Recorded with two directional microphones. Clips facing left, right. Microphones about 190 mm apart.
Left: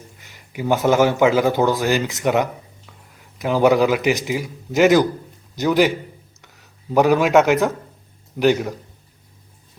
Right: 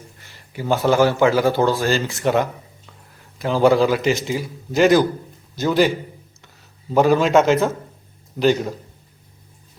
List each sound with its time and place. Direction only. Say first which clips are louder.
0.2 s speech: left 3 dB; 15° left (ahead or behind)
6.9 s speech: even; 15° left (ahead or behind)